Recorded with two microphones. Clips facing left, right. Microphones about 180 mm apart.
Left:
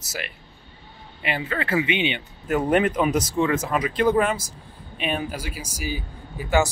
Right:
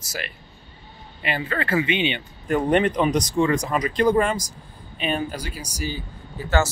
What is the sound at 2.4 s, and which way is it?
Speech, 5° left (ahead or behind).